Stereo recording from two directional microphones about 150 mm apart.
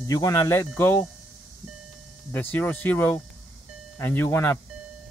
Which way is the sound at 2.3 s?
15° left (ahead or behind).